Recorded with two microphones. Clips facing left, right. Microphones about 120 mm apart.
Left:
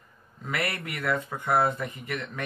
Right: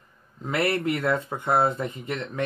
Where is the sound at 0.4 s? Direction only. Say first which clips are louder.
Right 7 dB; 25° right (ahead or behind).